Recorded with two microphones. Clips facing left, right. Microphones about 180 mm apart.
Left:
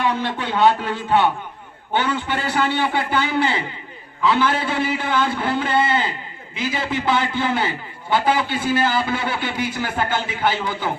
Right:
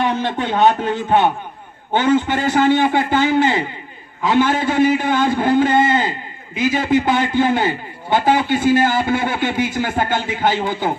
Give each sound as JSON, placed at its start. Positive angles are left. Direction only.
{"t": 0.3, "sound": "a man's voice", "side_deg": -45}
{"t": 1.9, "sound": "a man's voice", "side_deg": -45}